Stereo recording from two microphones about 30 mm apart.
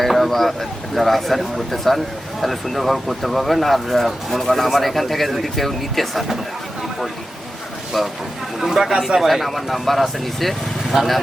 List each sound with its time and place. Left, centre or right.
0.0 s a sound: centre
0.3 s speech: centre
7.9 s speech: centre
9.2 s speech: centre